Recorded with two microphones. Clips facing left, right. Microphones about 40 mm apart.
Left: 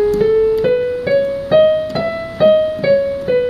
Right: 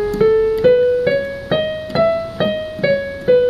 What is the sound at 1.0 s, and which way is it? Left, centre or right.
Music, centre.